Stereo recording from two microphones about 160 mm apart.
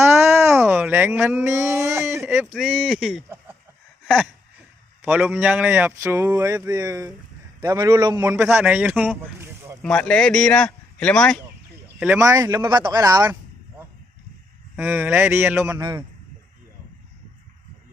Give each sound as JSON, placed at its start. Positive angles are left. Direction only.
{"t": 0.3, "sound": "a sound", "side_deg": -15}
{"t": 2.5, "sound": "speech", "side_deg": -5}
{"t": 4.0, "sound": "a sound", "side_deg": 5}
{"t": 5.0, "sound": "speech", "side_deg": -5}
{"t": 9.8, "sound": "speech", "side_deg": 5}
{"t": 11.9, "sound": "speech", "side_deg": -10}
{"t": 12.2, "sound": "speech", "side_deg": -20}
{"t": 14.8, "sound": "speech", "side_deg": -15}